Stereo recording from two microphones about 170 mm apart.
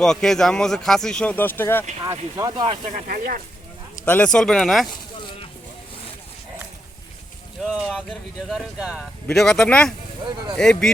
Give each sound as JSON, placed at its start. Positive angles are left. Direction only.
{"t": 0.0, "sound": "speech", "side_deg": 5}
{"t": 2.0, "sound": "speech", "side_deg": -20}
{"t": 2.9, "sound": "speech", "side_deg": -55}
{"t": 4.0, "sound": "speech", "side_deg": 10}
{"t": 4.9, "sound": "a sound", "side_deg": 30}
{"t": 7.6, "sound": "speech", "side_deg": 0}